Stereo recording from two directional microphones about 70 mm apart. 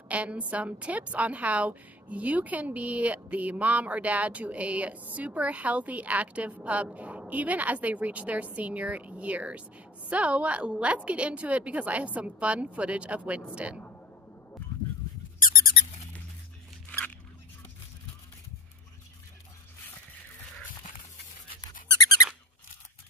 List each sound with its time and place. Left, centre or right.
0.1 s a woman's voice: centre
21.5 s squeak: left